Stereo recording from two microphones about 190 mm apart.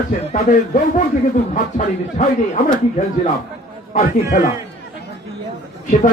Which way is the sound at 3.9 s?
45° left (ahead or behind).